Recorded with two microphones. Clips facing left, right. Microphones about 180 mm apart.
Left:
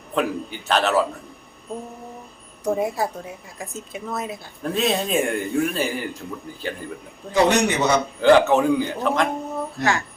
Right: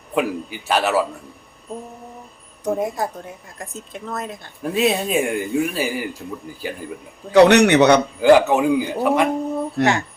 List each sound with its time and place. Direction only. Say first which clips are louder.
0.1 s a man's voice: right 2 dB; 10° right (ahead or behind)
2.6 s speech: even; centre (ahead or behind)
4.6 s a man's voice: right 3 dB; 5° right (ahead or behind)
7.3 s a man's voice: right 7 dB; 70° right (ahead or behind)
8.2 s a man's voice: left 1 dB; 10° right (ahead or behind)
9.8 s a man's voice: right 5 dB; 65° right (ahead or behind)